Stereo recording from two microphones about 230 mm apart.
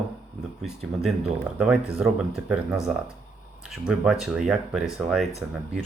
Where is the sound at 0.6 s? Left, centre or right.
Centre.